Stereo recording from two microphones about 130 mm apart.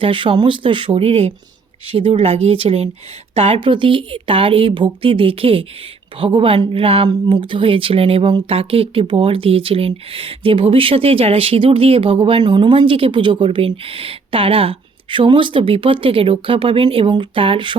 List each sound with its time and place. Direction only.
0.0 s speech: 40° right (ahead or behind)